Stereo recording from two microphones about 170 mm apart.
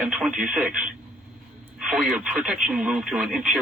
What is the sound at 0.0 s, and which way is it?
Speech, 5° right (ahead or behind).